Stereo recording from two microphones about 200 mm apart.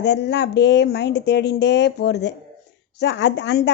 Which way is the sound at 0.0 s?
60° left (ahead or behind).